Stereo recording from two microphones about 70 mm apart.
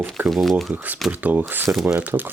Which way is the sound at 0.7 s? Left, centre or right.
Right.